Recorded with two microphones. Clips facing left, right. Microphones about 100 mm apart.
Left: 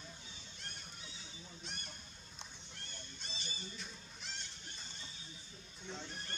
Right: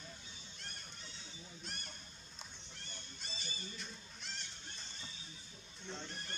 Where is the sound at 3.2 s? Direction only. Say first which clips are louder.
Even; centre (ahead or behind).